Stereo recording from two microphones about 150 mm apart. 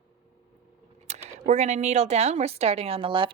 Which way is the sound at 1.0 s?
50° right (ahead or behind).